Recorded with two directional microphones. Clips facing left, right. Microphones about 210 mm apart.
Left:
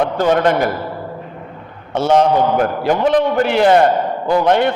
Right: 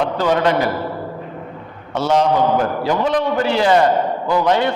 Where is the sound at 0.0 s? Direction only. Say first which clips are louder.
Left 2 dB; 50° left (ahead or behind).